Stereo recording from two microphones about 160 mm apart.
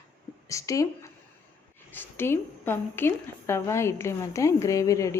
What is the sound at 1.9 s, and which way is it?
A woman's voice, 15° left (ahead or behind).